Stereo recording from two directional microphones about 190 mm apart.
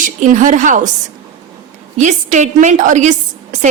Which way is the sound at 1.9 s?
40° right (ahead or behind).